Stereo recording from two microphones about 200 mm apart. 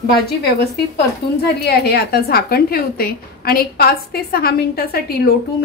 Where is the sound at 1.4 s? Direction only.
55° left (ahead or behind).